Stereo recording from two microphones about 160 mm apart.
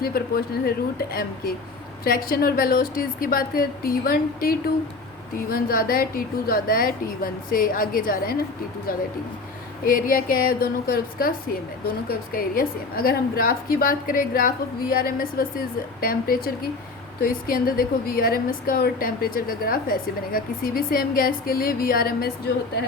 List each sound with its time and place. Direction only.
0.0 s a woman's voice: 70° left (ahead or behind)
9.8 s a woman's voice: 60° left (ahead or behind)